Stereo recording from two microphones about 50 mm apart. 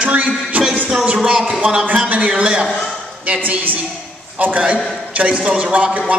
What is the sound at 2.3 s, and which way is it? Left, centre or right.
Speech, centre.